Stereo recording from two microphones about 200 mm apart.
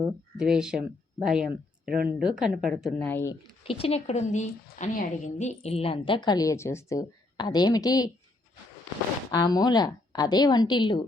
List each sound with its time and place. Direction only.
0.3 s a woman's voice: 5° right (ahead or behind)
3.1 s speech: 10° left (ahead or behind)
3.6 s a woman's voice: 30° left (ahead or behind)
9.3 s a woman's voice: 20° left (ahead or behind)